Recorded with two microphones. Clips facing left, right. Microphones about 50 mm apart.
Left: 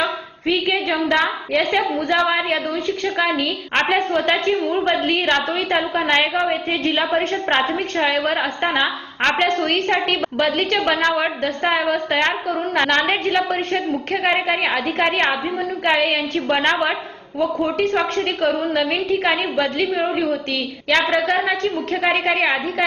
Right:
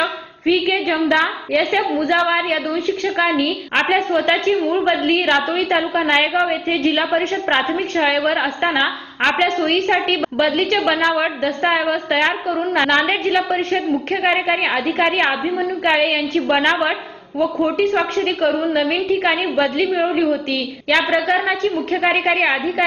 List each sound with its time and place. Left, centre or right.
0.9 s a woman's voice: right
1.1 s a woman's voice: centre
3.8 s a woman's voice: centre